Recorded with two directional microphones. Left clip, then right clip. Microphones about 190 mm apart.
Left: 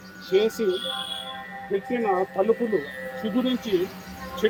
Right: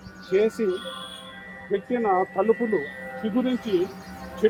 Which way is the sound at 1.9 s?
5° right (ahead or behind).